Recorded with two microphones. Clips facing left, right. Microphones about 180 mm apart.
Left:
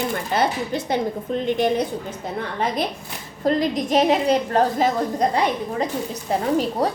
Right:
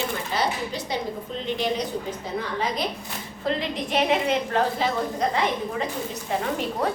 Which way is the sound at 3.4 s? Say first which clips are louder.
Left 7 dB; 40° left (ahead or behind).